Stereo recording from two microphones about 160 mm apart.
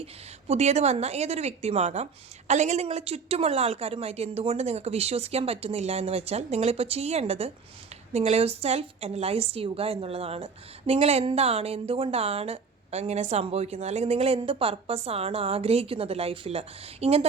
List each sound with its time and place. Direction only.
0.0 s a woman's voice: 40° right (ahead or behind)